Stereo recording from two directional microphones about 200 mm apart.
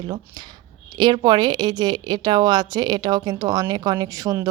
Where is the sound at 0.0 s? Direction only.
20° right (ahead or behind).